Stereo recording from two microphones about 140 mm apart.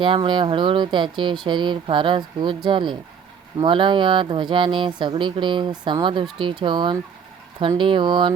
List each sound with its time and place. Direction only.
0.0 s speech: 35° right (ahead or behind)